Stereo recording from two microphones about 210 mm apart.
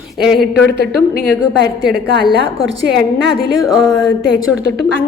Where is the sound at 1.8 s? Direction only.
50° right (ahead or behind).